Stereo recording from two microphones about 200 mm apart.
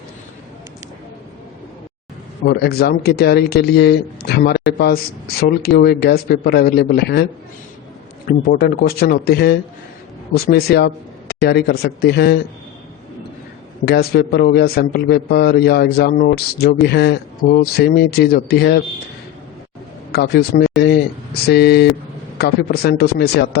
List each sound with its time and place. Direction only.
2.4 s a man's voice: 50° left (ahead or behind)
8.3 s a man's voice: 50° left (ahead or behind)
13.8 s a man's voice: 55° left (ahead or behind)
20.1 s a man's voice: 55° left (ahead or behind)